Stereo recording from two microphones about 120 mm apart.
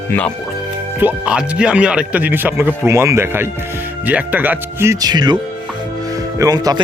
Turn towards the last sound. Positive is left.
turn(degrees=-35)  # may be behind; listen again after turning